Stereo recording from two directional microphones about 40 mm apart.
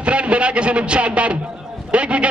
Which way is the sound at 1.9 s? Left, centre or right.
Right.